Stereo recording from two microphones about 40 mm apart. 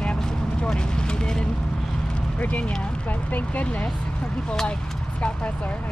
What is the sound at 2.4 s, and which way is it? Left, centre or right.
Speech, left.